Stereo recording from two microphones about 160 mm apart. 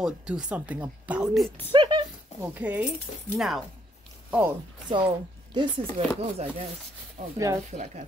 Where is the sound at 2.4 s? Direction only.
10° right (ahead or behind).